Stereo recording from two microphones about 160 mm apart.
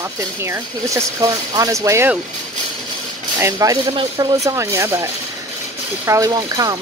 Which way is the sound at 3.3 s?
20° right (ahead or behind).